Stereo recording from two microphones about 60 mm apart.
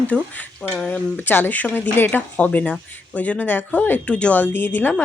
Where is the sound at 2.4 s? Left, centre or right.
Left.